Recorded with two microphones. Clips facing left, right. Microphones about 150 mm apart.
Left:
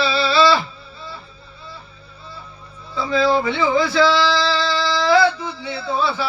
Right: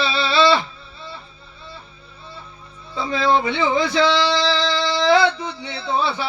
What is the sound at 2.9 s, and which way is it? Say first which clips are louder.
Speech: left 1 dB; 20° right (ahead or behind).